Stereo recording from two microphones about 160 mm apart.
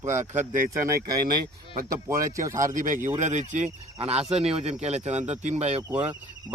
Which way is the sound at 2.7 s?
55° right (ahead or behind).